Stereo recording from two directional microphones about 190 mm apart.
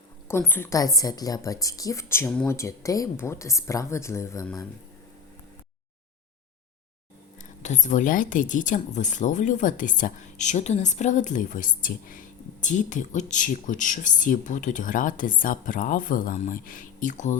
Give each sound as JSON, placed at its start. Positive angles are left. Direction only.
{"t": 0.3, "sound": "a woman's voice", "side_deg": 10}
{"t": 7.6, "sound": "speech", "side_deg": 40}